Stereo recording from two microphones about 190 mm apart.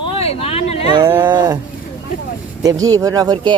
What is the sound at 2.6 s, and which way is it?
Speech, 20° right (ahead or behind).